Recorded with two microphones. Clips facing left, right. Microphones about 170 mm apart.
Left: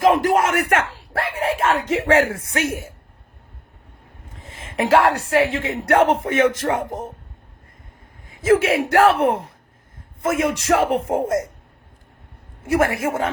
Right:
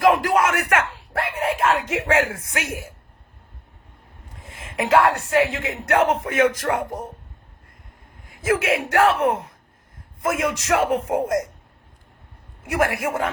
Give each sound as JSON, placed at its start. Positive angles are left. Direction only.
{"t": 0.0, "sound": "speech", "side_deg": 25}
{"t": 4.4, "sound": "a sound", "side_deg": 25}
{"t": 5.3, "sound": "speech", "side_deg": 30}
{"t": 8.4, "sound": "speech", "side_deg": 25}
{"t": 12.6, "sound": "speech", "side_deg": 30}